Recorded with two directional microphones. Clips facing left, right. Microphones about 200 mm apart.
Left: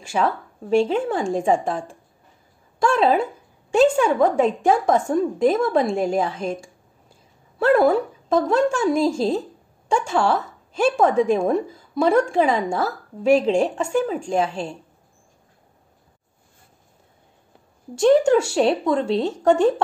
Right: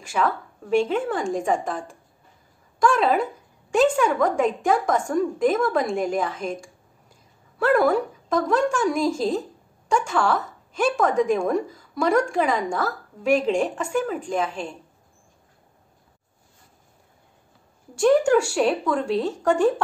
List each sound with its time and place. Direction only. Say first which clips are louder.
0.1 s a woman's voice: left 2 dB; 30° left (ahead or behind)
2.8 s a woman's voice: left 2 dB; 30° left (ahead or behind)
17.9 s a woman's voice: left 2 dB; 25° left (ahead or behind)